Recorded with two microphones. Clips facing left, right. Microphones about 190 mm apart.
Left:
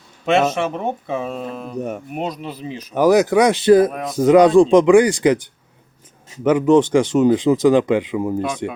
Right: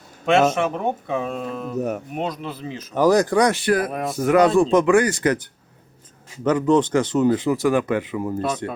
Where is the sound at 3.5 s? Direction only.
25° left (ahead or behind).